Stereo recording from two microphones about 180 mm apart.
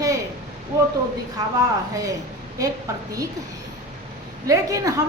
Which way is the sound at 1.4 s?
20° right (ahead or behind).